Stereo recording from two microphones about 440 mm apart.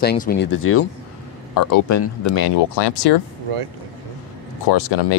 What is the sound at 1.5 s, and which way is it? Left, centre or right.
Speech, left.